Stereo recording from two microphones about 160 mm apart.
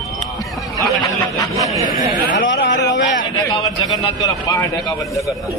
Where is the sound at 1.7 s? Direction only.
20° right (ahead or behind).